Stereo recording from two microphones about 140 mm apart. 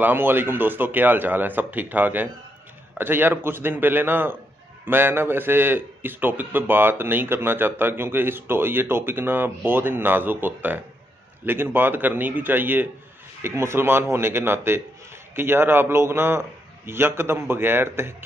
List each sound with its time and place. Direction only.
0.0 s a man's voice: 15° right (ahead or behind)